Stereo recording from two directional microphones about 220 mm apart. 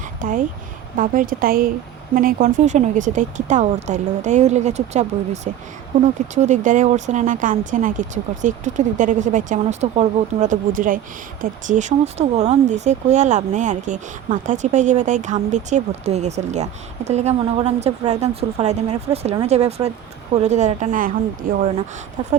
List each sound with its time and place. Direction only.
0.2 s speech: 35° right (ahead or behind)